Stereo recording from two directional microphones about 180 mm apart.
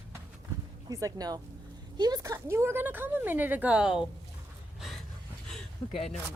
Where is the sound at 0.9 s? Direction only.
20° right (ahead or behind); by 4.1 s 5° right (ahead or behind).